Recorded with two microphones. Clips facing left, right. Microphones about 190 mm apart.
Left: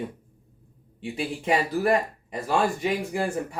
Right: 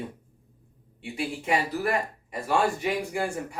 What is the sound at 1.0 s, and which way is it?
Speech, 30° left (ahead or behind).